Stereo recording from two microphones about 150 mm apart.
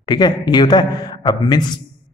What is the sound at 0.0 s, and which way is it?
A man's voice, 30° left (ahead or behind).